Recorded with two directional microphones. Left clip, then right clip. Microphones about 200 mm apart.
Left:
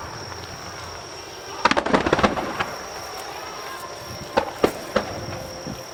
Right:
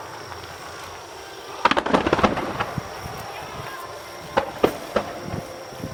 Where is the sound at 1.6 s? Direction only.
5° left (ahead or behind).